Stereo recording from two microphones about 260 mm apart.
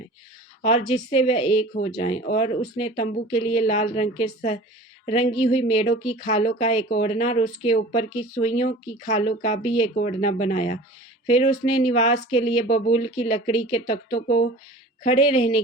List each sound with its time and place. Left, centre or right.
0.6 s speech: left